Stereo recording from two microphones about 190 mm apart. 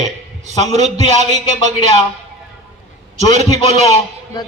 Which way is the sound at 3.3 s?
35° right (ahead or behind).